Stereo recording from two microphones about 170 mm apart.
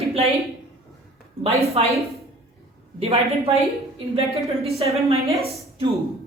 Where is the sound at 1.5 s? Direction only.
35° right (ahead or behind).